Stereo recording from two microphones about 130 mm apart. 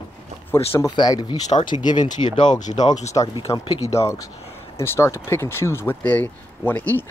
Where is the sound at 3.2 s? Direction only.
35° left (ahead or behind).